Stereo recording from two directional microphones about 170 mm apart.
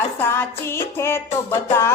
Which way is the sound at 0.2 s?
15° left (ahead or behind).